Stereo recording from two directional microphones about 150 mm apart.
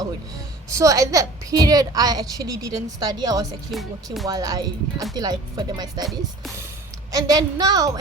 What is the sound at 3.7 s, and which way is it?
Speech, centre (ahead or behind).